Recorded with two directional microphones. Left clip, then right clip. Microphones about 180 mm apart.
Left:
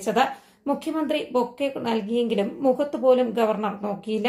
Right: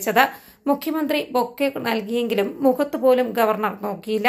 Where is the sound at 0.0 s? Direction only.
15° right (ahead or behind).